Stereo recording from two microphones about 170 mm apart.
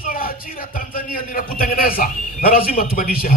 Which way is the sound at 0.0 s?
55° left (ahead or behind).